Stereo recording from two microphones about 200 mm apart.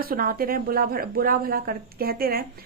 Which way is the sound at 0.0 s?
45° right (ahead or behind).